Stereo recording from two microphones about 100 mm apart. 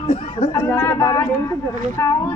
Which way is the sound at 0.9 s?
30° left (ahead or behind).